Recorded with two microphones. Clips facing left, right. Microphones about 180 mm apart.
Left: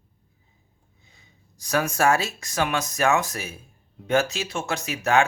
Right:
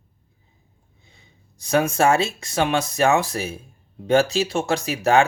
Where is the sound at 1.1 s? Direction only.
30° right (ahead or behind).